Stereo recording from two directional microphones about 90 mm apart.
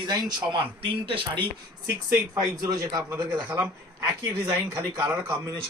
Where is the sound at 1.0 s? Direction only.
70° right (ahead or behind).